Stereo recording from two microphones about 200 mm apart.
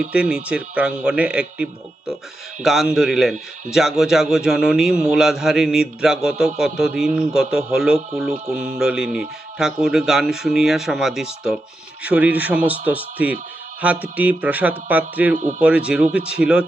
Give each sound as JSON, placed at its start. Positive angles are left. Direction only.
{"t": 0.0, "sound": "a man's voice", "side_deg": -5}
{"t": 15.4, "sound": "speech", "side_deg": -35}
{"t": 15.6, "sound": "a man's voice", "side_deg": -5}